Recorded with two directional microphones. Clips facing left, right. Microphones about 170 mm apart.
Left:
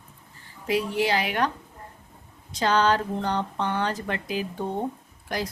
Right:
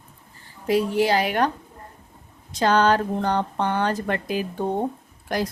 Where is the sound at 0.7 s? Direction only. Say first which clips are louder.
Right 4 dB; 40° right (ahead or behind).